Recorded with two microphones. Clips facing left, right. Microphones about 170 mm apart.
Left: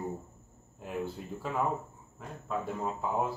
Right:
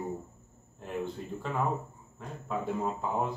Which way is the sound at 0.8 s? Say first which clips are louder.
Right 1 dB; 5° left (ahead or behind).